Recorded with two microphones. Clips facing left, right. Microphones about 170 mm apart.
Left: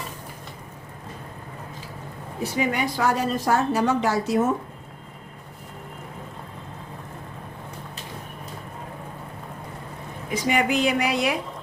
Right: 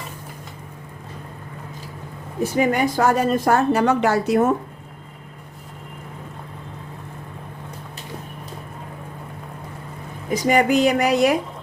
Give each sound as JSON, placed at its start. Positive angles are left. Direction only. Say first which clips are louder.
{"t": 2.4, "sound": "a woman's voice", "louder": "right 6 dB", "side_deg": -45}
{"t": 10.3, "sound": "a woman's voice", "louder": "right 5 dB", "side_deg": -40}